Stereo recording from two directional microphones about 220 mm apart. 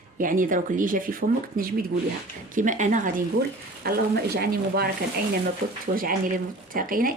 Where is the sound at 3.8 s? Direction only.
45° right (ahead or behind).